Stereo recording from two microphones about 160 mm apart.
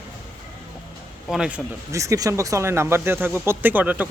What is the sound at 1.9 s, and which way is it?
A man's voice, 20° right (ahead or behind).